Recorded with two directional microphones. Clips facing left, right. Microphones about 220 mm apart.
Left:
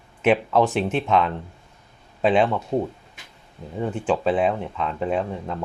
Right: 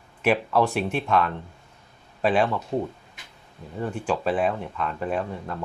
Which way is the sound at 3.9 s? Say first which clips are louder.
Left 3 dB; 20° left (ahead or behind).